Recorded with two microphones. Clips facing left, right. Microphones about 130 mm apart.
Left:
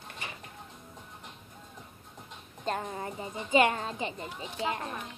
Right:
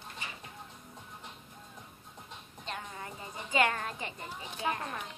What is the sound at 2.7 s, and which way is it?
Speech, 40° left (ahead or behind).